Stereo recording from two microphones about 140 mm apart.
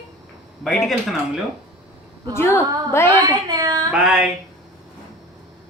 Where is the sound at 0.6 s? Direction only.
Centre (ahead or behind).